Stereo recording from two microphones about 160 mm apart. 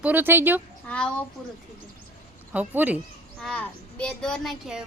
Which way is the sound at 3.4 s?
5° left (ahead or behind).